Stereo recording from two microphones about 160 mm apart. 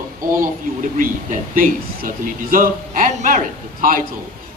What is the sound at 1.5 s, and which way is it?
A man's voice, 60° right (ahead or behind).